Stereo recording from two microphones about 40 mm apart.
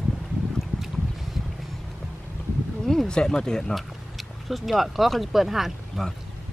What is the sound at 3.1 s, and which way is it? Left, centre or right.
Speech, centre.